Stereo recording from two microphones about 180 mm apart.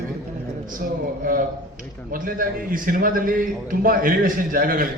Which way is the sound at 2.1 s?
50° right (ahead or behind).